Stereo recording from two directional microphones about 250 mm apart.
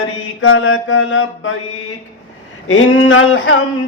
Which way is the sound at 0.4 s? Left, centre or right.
Left.